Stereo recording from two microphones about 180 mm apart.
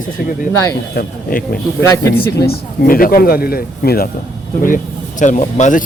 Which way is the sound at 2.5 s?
55° left (ahead or behind).